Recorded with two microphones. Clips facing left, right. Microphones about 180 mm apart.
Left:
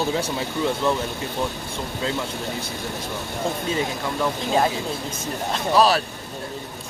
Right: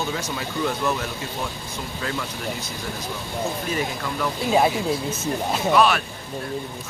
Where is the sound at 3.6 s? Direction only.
25° left (ahead or behind).